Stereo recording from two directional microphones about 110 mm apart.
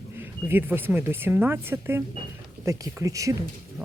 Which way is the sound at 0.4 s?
20° right (ahead or behind).